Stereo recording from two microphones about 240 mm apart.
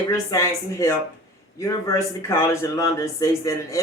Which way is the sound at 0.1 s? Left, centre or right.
Centre.